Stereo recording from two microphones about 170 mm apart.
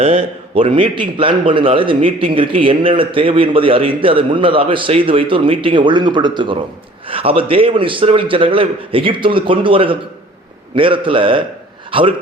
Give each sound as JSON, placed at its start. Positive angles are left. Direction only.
{"t": 0.0, "sound": "a man's voice", "side_deg": -35}